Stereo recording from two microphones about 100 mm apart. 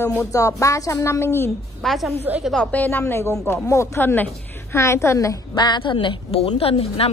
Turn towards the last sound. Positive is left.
turn(degrees=75)  # may be behind; listen again after turning